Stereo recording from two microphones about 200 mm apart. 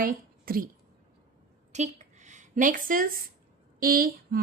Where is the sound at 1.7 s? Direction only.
35° right (ahead or behind).